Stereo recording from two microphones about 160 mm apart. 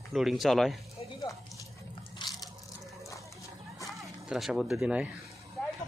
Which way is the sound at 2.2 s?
30° left (ahead or behind).